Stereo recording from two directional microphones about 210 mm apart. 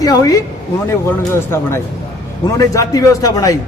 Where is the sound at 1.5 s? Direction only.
10° left (ahead or behind).